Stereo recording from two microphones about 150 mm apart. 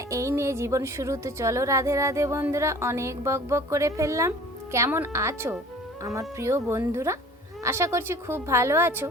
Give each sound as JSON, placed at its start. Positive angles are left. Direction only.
{"t": 0.1, "sound": "a woman's voice", "side_deg": -20}